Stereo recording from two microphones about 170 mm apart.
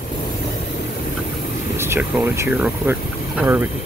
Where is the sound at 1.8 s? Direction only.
10° right (ahead or behind).